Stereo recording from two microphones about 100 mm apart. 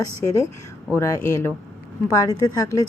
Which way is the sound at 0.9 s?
30° left (ahead or behind).